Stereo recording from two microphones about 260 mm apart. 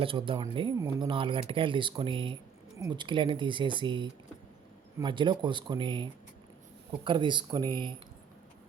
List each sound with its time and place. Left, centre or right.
0.0 s speech: centre